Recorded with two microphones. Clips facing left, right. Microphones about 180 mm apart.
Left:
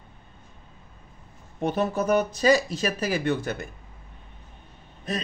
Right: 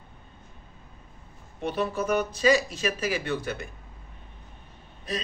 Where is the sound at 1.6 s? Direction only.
45° left (ahead or behind).